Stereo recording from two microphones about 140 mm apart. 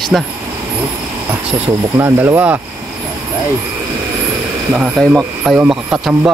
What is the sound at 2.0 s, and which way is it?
Speech, 15° right (ahead or behind).